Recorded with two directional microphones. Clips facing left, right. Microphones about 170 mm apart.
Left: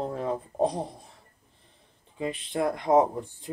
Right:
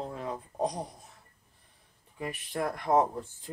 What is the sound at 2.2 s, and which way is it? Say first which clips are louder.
Speech: left 5 dB; 20° left (ahead or behind).